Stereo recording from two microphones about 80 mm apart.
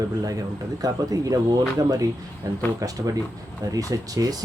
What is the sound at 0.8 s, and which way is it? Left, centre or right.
Speech, right.